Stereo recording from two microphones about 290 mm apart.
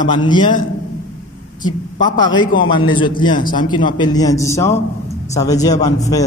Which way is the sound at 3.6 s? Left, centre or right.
Centre.